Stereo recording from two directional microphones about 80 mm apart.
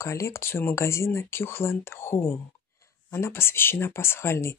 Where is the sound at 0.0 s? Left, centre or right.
Left.